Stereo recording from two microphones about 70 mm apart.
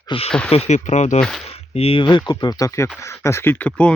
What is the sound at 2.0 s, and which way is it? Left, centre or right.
Speech, left.